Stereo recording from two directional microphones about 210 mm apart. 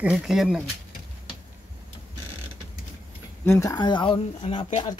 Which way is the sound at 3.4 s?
15° left (ahead or behind).